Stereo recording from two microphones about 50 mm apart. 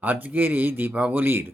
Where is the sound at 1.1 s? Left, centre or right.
Right.